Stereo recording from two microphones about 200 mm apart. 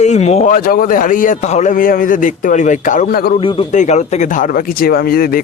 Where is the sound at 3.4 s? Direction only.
25° left (ahead or behind); by 5.4 s 50° left (ahead or behind).